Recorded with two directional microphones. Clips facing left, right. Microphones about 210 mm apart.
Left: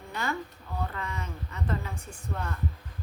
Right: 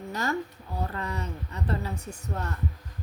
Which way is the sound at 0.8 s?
35° right (ahead or behind).